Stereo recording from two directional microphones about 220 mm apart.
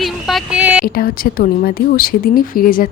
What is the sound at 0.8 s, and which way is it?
A woman's voice, 40° left (ahead or behind).